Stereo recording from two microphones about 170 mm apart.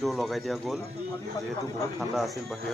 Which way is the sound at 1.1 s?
20° left (ahead or behind).